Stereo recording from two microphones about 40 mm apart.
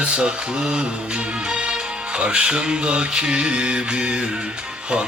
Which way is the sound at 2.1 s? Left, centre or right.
Right.